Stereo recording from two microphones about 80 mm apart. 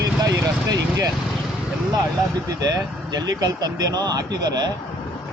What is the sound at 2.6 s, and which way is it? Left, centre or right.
Speech, right.